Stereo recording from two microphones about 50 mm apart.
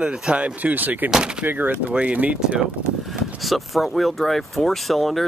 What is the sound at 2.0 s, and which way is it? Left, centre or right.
Speech, right.